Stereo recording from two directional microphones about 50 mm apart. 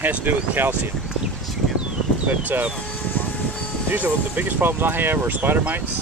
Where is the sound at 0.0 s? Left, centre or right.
Right.